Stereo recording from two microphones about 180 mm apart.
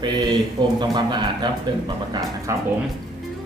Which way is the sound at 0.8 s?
25° right (ahead or behind).